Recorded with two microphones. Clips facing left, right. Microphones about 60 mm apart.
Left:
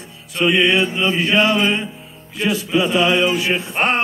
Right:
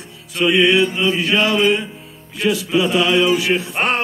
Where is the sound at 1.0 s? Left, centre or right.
Left.